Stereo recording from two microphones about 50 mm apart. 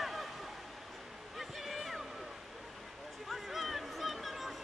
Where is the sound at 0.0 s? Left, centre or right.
Centre.